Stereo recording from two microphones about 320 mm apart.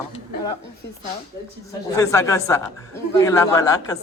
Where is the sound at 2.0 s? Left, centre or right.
Centre.